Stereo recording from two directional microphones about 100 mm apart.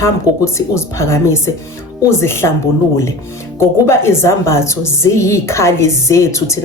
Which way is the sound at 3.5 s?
25° left (ahead or behind).